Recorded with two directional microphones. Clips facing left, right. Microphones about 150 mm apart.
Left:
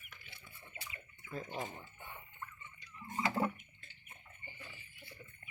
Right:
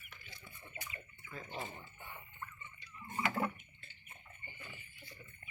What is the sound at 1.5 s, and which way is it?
Speech, 15° left (ahead or behind).